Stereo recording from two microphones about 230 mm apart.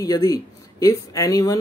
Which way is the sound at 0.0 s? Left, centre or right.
Centre.